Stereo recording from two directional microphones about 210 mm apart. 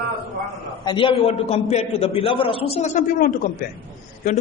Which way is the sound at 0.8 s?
25° left (ahead or behind).